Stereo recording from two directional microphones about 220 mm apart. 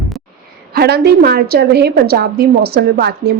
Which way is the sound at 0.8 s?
45° right (ahead or behind).